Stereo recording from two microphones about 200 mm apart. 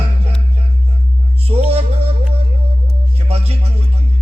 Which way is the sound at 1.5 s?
25° right (ahead or behind).